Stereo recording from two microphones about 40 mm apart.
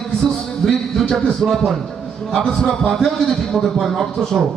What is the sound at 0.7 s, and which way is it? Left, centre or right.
Music, centre.